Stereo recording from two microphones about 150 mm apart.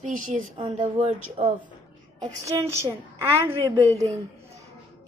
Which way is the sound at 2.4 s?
20° right (ahead or behind).